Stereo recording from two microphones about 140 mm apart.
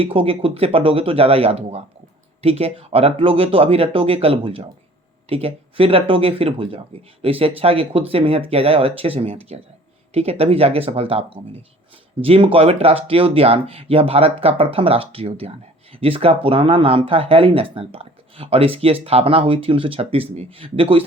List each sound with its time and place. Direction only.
0.0 s speech: 40° right (ahead or behind)